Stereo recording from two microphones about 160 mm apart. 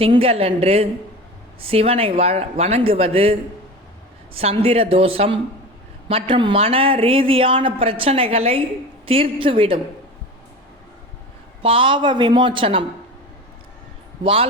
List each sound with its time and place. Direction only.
0.0 s speech: 35° right (ahead or behind)
4.4 s speech: 40° right (ahead or behind)
11.6 s speech: 35° right (ahead or behind)